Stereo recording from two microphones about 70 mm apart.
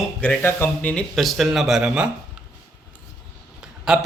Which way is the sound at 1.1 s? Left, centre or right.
Centre.